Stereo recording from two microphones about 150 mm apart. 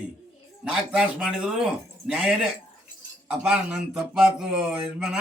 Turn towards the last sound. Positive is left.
turn(degrees=-5)  # may be behind; listen again after turning